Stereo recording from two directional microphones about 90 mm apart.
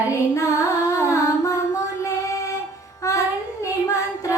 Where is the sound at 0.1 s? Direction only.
35° left (ahead or behind).